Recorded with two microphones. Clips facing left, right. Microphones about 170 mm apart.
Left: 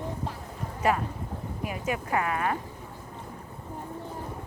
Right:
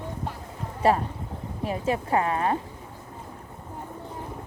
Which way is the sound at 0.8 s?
35° right (ahead or behind).